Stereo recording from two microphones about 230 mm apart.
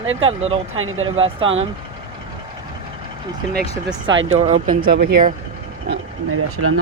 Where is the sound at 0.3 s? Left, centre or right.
Right.